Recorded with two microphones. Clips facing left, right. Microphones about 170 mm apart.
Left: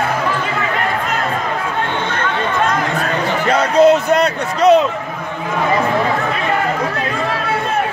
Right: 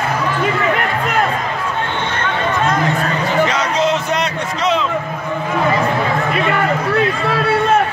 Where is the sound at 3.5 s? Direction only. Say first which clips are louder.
Left 6 dB; 55° left (ahead or behind).